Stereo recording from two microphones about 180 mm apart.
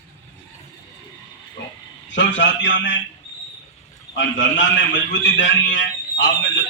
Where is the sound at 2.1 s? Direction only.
90° left.